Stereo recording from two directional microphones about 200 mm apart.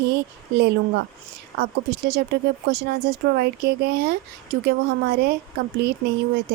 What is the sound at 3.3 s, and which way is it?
Speech, 55° right (ahead or behind).